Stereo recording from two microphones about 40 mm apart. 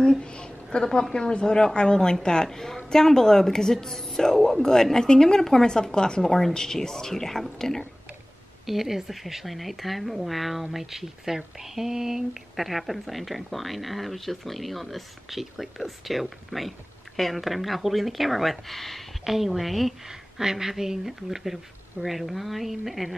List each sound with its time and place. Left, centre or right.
0.0 s a sound: left
1.1 s a woman's voice: left
6.2 s a woman's voice: centre
8.6 s speech: centre
20.3 s speech: centre